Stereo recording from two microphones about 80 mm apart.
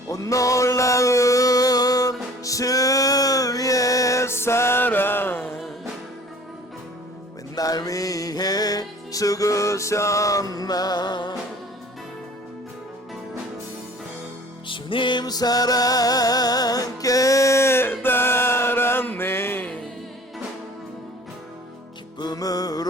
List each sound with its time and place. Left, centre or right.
0.1 s music: left
7.5 s music: left
14.7 s music: left
15.2 s music: left
22.2 s music: left